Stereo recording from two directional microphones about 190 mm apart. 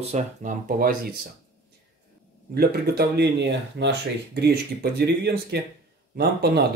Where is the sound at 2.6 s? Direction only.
60° right (ahead or behind).